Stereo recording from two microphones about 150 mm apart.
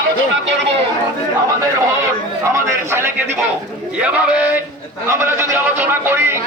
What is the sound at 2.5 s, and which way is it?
A man's voice, 15° right (ahead or behind).